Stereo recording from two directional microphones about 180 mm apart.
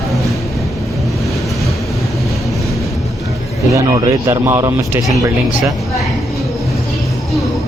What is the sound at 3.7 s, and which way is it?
Speech, 20° right (ahead or behind).